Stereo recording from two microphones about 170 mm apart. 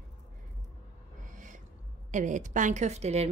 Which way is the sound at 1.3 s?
50° right (ahead or behind).